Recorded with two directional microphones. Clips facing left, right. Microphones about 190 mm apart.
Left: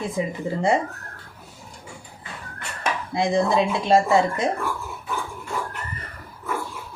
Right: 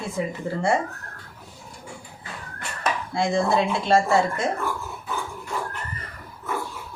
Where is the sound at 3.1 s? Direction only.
20° left (ahead or behind).